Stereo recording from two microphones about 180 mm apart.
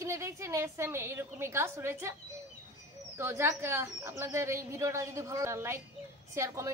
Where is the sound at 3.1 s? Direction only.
15° right (ahead or behind).